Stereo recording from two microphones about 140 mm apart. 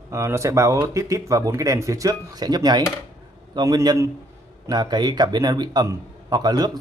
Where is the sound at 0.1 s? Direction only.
20° right (ahead or behind).